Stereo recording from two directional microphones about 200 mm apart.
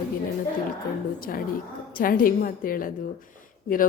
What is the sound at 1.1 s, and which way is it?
A woman's voice, 45° left (ahead or behind).